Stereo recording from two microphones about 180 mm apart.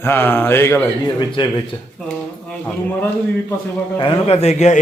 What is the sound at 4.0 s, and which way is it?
Speech, 30° left (ahead or behind).